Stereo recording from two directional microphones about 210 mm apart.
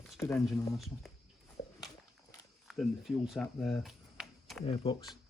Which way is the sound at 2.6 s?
Centre (ahead or behind).